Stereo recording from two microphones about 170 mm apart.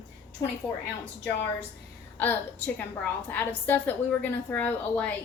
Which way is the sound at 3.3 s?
10° left (ahead or behind).